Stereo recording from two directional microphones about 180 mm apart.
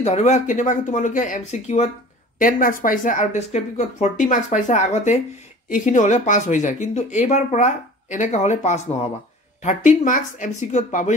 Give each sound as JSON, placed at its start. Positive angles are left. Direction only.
{"t": 0.0, "sound": "speech", "side_deg": 40}